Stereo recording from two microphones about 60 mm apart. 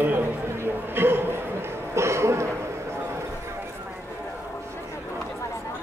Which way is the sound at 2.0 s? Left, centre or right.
Right.